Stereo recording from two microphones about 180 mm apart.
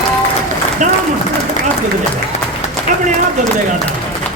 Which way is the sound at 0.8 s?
45° right (ahead or behind).